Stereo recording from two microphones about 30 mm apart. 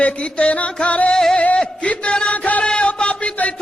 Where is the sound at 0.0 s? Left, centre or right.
Left.